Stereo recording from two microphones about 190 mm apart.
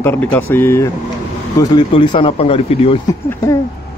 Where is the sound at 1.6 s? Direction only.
25° left (ahead or behind).